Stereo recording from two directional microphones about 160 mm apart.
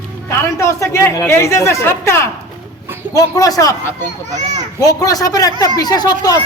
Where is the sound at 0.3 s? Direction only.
15° left (ahead or behind).